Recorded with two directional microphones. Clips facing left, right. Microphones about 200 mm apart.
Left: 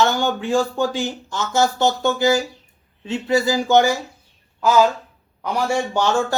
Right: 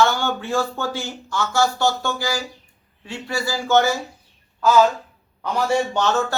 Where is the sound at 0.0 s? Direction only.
15° left (ahead or behind).